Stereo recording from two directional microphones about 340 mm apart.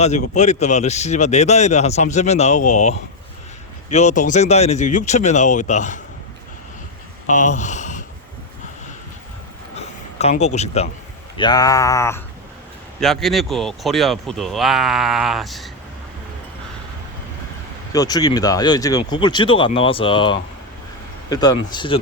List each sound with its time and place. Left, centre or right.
0.0 s speech: centre
3.8 s speech: centre
7.3 s speech: left
9.7 s a sound: centre
11.3 s speech: centre
17.9 s speech: centre